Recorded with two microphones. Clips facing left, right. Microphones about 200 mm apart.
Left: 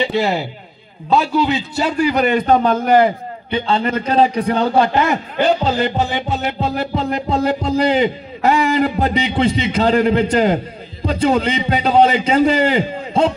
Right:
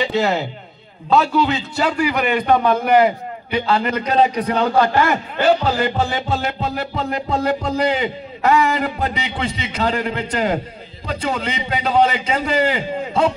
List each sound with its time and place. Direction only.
0.2 s a man's voice: 15° left (ahead or behind)
2.0 s a man's voice: 30° left (ahead or behind)
3.4 s music: 25° left (ahead or behind)